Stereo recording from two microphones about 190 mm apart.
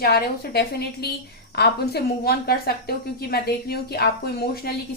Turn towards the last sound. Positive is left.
turn(degrees=55)  # may be behind; listen again after turning